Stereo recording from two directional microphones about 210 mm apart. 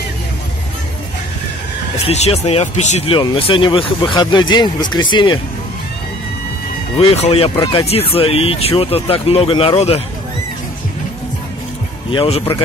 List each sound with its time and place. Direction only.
2.0 s speech: 30° left (ahead or behind)
7.0 s speech: 30° left (ahead or behind)
12.1 s speech: 25° left (ahead or behind)